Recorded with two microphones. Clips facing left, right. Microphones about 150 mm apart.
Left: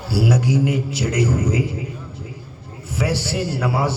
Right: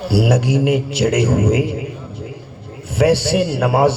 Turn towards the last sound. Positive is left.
turn(degrees=-65)  # may be behind; listen again after turning